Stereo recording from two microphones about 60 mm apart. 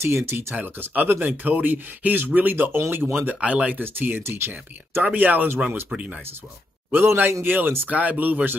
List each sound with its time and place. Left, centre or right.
0.0 s speech: right
0.6 s speech: right
3.3 s speech: right
6.9 s speech: right